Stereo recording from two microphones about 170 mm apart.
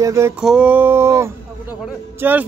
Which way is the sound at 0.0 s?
15° right (ahead or behind).